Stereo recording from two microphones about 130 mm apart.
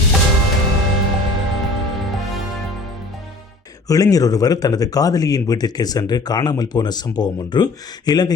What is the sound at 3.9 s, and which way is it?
Speech, 25° left (ahead or behind).